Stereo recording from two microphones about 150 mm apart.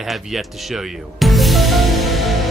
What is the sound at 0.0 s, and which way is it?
Music, centre (ahead or behind).